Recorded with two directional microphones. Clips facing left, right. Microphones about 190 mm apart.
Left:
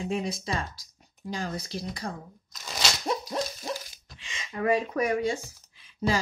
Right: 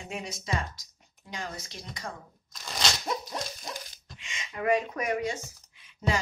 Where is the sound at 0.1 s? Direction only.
35° left (ahead or behind).